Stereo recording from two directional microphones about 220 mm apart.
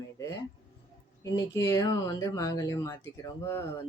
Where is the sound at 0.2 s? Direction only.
15° left (ahead or behind).